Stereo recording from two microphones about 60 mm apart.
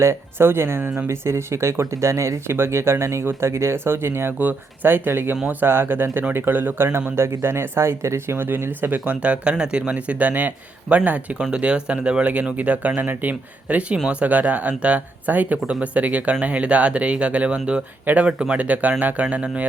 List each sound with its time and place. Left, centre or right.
0.0 s speech: right
4.4 s speech: right